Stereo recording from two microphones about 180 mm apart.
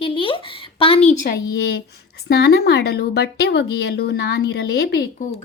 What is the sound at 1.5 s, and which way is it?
Speech, 70° left (ahead or behind).